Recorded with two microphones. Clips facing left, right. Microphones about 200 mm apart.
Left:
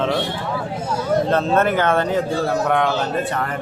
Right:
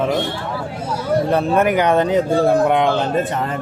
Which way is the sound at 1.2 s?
15° right (ahead or behind).